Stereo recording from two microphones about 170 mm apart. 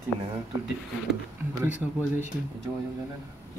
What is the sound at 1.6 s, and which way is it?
Speech, 15° right (ahead or behind).